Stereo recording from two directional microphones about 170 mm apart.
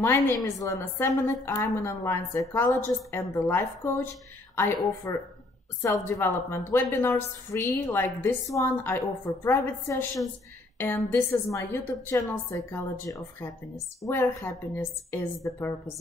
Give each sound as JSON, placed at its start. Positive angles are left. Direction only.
{"t": 0.0, "sound": "a woman's voice", "side_deg": 15}
{"t": 11.1, "sound": "a woman's voice", "side_deg": 15}